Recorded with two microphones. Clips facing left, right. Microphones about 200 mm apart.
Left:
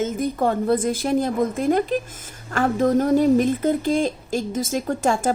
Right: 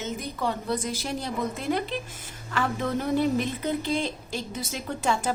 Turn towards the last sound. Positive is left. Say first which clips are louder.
# left 6 dB
turn(degrees=45)  # may be behind; listen again after turning